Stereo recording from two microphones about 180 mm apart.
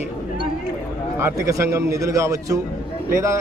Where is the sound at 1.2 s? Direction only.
15° right (ahead or behind).